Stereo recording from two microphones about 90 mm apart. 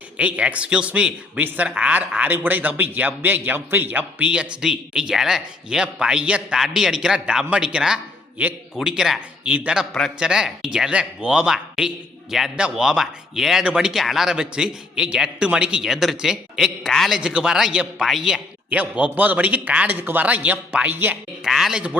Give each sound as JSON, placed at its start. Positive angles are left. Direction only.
{"t": 0.2, "sound": "a man's voice", "side_deg": -15}
{"t": 8.4, "sound": "a man's voice", "side_deg": -20}
{"t": 8.7, "sound": "a man's voice", "side_deg": -5}
{"t": 21.4, "sound": "speech", "side_deg": -5}